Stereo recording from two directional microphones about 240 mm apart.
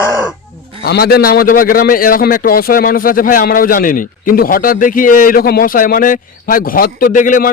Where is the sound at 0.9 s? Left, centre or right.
Left.